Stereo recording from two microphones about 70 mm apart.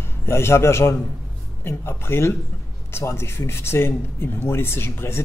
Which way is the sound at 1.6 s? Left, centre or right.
Left.